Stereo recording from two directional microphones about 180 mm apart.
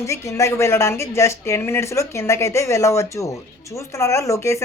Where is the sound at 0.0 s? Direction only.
15° left (ahead or behind).